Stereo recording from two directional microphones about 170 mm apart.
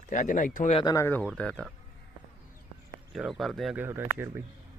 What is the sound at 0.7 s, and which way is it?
Speech, 25° left (ahead or behind).